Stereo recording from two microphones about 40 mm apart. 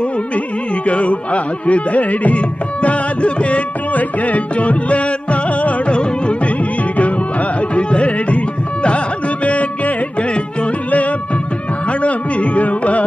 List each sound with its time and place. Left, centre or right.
0.8 s music: left
7.7 s music: left
12.0 s carnatic music: left